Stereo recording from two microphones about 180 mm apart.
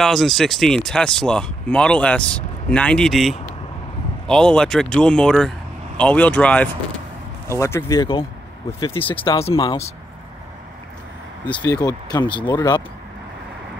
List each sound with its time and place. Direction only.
0.0 s speech: centre (ahead or behind); by 9.9 s 30° left (ahead or behind)
11.6 s speech: 20° left (ahead or behind)